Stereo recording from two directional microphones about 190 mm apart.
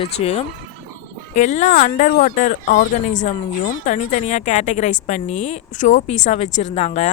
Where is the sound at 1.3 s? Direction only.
40° left (ahead or behind).